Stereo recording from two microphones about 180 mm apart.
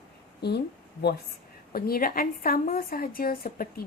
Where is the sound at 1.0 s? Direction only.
65° left (ahead or behind).